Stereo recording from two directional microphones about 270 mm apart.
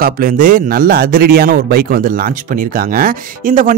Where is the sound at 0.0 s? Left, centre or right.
Right.